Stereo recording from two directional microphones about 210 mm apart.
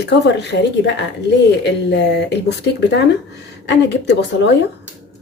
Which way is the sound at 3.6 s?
55° left (ahead or behind).